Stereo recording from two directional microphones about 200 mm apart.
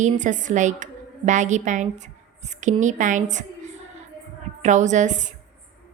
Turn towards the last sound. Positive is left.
turn(degrees=-35)  # may be behind; listen again after turning